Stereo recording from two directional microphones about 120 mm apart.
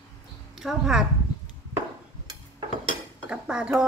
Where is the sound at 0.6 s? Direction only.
5° right (ahead or behind).